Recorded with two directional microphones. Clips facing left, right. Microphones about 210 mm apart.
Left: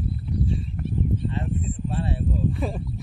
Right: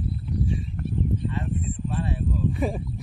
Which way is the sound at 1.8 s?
35° left (ahead or behind).